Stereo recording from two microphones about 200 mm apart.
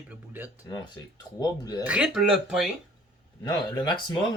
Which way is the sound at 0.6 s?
20° left (ahead or behind).